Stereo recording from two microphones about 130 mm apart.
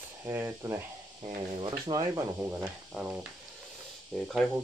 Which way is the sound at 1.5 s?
35° right (ahead or behind).